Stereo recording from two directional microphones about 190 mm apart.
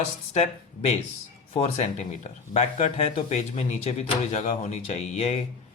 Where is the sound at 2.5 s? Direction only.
35° left (ahead or behind).